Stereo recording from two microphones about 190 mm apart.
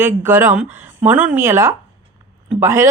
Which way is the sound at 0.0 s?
10° right (ahead or behind).